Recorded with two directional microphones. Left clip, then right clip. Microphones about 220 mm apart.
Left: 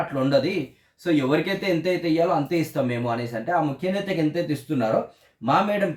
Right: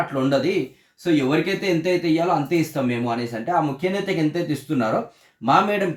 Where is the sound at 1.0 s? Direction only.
Centre (ahead or behind).